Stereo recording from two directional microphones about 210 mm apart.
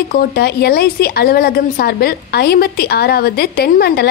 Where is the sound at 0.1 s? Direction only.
45° left (ahead or behind).